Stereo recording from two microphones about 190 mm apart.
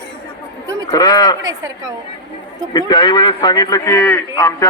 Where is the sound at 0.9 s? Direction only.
20° left (ahead or behind).